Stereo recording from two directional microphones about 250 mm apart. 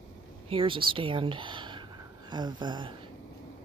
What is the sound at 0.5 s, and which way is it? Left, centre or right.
Speech, right.